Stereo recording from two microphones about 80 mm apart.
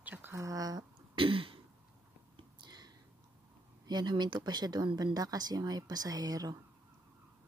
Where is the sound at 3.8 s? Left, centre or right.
Right.